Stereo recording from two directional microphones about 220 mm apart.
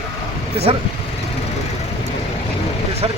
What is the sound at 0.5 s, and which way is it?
Speech, 25° right (ahead or behind).